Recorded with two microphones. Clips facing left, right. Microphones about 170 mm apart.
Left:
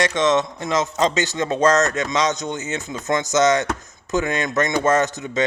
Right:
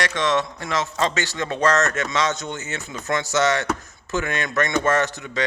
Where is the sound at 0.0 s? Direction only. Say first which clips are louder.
Left 4 dB; 20° left (ahead or behind).